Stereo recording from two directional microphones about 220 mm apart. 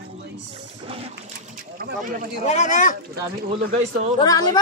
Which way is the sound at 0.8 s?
25° right (ahead or behind).